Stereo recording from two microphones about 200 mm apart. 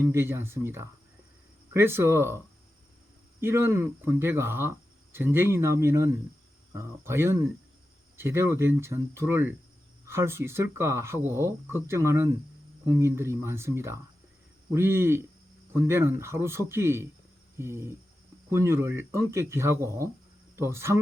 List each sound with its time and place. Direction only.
0.0 s speech: 10° right (ahead or behind)
3.4 s speech: 10° right (ahead or behind)